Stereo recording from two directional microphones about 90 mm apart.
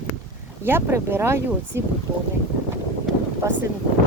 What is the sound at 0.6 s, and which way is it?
Speech, 25° right (ahead or behind).